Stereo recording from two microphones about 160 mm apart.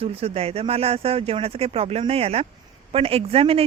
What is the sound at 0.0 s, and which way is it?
Speech, 40° right (ahead or behind).